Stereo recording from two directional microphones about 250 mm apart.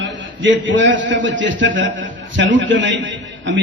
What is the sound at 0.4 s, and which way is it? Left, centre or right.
A man's voice, right.